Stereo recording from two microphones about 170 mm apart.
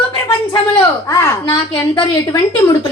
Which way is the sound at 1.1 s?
25° left (ahead or behind).